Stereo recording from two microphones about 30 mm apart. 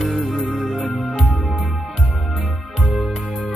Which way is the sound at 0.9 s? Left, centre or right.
Centre.